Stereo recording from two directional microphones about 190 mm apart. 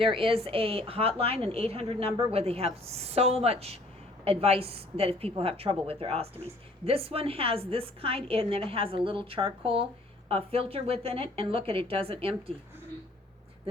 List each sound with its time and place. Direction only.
0.0 s a woman's voice: 30° right (ahead or behind)